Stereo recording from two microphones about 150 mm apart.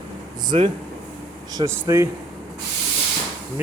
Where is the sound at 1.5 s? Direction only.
20° right (ahead or behind).